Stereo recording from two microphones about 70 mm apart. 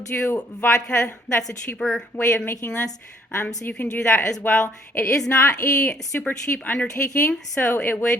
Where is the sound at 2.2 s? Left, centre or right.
Left.